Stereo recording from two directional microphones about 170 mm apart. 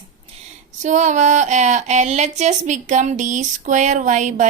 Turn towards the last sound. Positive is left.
turn(degrees=-45)  # may be behind; listen again after turning